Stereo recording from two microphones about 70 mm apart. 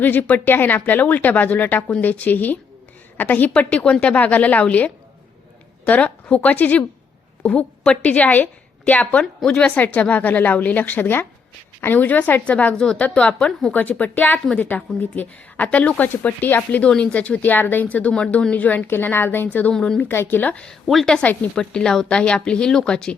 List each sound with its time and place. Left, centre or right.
0.0 s speech: left
8.0 s a woman's voice: left
20.8 s a woman's voice: centre
21.2 s a woman's voice: centre